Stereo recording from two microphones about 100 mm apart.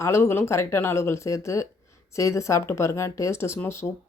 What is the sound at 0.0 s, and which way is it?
Speech, 25° left (ahead or behind).